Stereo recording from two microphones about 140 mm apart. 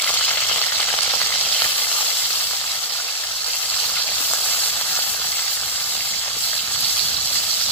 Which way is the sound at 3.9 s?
10° left (ahead or behind).